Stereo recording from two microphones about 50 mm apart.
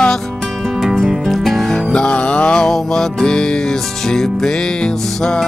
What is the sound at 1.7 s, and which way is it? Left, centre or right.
Music, centre.